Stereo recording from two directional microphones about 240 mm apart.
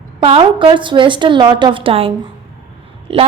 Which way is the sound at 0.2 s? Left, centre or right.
Right.